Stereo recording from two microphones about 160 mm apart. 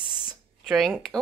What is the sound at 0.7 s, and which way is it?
Speech, centre (ahead or behind).